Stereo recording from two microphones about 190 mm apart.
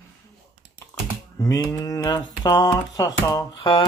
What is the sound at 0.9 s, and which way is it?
Computer keyboard, 15° left (ahead or behind).